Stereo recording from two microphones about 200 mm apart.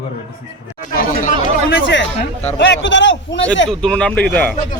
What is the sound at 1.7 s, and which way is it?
A man's voice, 65° left (ahead or behind).